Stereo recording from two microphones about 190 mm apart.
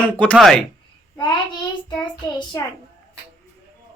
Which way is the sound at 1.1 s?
25° left (ahead or behind).